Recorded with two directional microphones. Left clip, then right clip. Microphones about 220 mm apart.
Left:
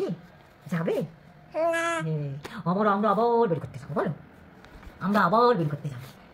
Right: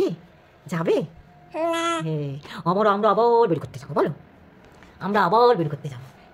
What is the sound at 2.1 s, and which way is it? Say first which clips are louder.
A woman's voice: right 5 dB; 45° right (ahead or behind).